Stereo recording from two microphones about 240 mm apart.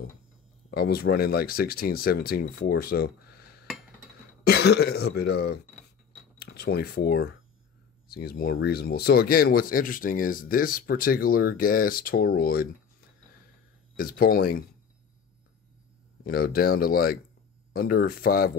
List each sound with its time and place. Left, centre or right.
0.7 s speech: left
13.9 s speech: left
16.3 s speech: left